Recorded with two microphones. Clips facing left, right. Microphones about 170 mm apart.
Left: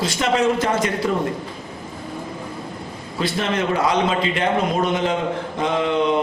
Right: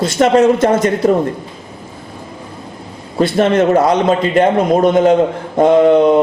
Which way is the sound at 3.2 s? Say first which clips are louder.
Right 10 dB; 45° right (ahead or behind).